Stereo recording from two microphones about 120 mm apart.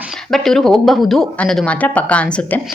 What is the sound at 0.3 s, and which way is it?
Speech, 5° left (ahead or behind).